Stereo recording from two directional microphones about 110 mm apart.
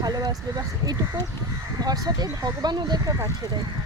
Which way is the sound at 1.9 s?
35° right (ahead or behind).